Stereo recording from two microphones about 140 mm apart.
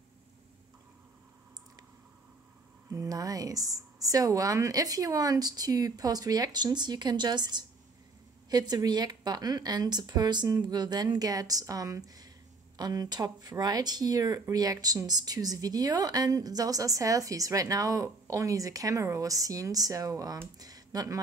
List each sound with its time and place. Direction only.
2.9 s speech: 25° right (ahead or behind)